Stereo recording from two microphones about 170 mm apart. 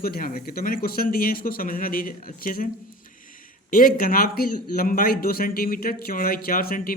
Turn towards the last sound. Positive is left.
turn(degrees=60)  # may be behind; listen again after turning